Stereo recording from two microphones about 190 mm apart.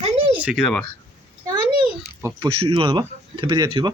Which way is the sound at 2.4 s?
30° right (ahead or behind).